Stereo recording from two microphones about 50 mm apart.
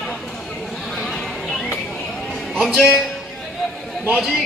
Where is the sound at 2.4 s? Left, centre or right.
Centre.